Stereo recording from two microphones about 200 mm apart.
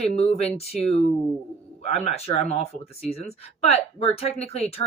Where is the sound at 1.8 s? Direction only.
30° left (ahead or behind).